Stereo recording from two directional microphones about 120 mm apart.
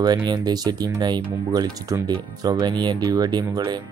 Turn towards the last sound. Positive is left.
turn(degrees=-35)  # may be behind; listen again after turning